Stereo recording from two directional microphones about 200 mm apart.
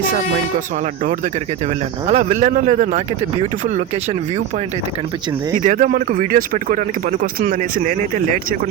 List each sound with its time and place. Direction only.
1.0 s speech: 40° right (ahead or behind)